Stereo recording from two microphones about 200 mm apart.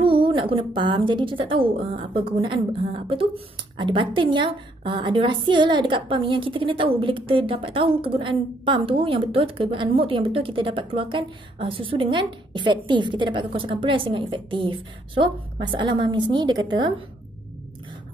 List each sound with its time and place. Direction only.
0.0 s a woman's voice: 25° right (ahead or behind)